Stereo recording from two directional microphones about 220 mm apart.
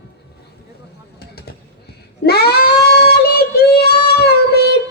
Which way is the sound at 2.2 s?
45° left (ahead or behind).